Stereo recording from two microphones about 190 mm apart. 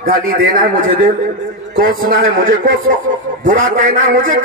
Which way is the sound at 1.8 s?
50° right (ahead or behind).